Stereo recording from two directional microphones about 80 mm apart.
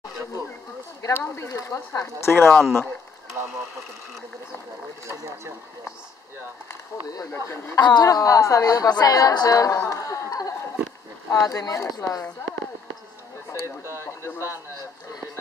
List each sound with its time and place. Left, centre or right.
1.1 s speech: left
2.4 s speech: centre
5.0 s speech: right
6.7 s speech: left
7.8 s a woman's voice: left
14.0 s speech: left